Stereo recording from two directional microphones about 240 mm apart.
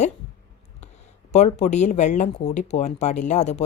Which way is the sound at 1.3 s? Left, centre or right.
Left.